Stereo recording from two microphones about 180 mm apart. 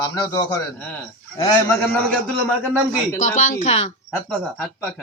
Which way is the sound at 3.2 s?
45° left (ahead or behind).